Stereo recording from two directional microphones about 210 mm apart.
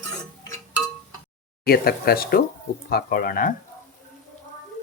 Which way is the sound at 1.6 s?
50° left (ahead or behind).